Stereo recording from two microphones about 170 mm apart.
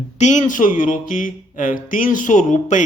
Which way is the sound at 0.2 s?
45° left (ahead or behind).